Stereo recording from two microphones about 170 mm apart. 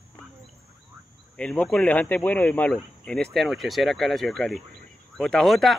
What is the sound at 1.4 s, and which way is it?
Speech, 5° left (ahead or behind).